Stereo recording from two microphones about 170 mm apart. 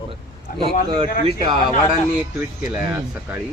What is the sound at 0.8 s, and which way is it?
Speech, 30° right (ahead or behind).